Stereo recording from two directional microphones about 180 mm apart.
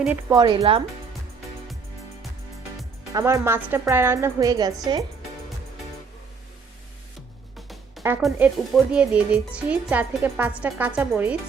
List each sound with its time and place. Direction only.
0.3 s speech: 25° right (ahead or behind)
3.1 s speech: 20° right (ahead or behind)
8.2 s speech: 5° right (ahead or behind)